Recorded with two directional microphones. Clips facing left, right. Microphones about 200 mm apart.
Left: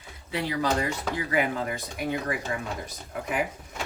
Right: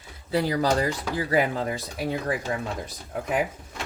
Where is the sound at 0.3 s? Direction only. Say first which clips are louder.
Right 4 dB; 35° right (ahead or behind).